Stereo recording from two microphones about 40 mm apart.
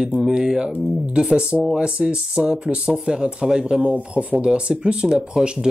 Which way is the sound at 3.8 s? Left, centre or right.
Right.